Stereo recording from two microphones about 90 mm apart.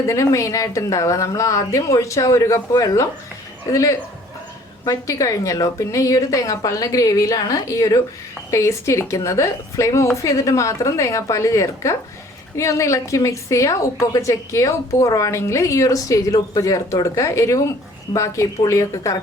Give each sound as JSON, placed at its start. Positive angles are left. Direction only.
{"t": 0.0, "sound": "a woman's voice", "side_deg": 35}